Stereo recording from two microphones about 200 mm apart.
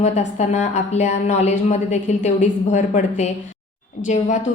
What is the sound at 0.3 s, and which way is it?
A woman's voice, 35° left (ahead or behind).